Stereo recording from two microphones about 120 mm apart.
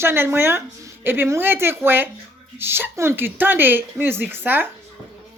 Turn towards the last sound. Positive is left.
turn(degrees=-15)  # may be behind; listen again after turning